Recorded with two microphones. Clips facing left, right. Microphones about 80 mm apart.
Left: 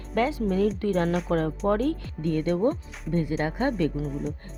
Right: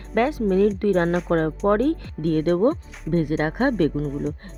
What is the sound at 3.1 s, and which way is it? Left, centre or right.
Speech, right.